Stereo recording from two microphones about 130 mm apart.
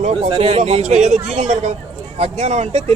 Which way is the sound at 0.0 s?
55° right (ahead or behind).